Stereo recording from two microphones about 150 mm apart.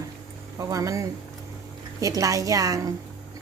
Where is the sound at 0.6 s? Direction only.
20° right (ahead or behind).